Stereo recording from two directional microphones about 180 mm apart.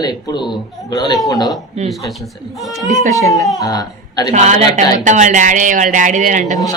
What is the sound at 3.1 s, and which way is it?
Speech, 20° left (ahead or behind).